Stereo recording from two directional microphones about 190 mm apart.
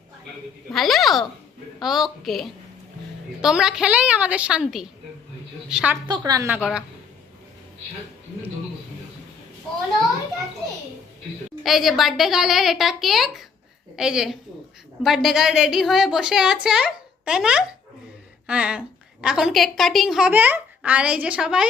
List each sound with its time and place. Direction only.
0.7 s a woman's voice: centre (ahead or behind)
6.1 s a woman's voice: 20° right (ahead or behind)
6.6 s a woman's voice: centre (ahead or behind)
11.6 s a woman's voice: centre (ahead or behind)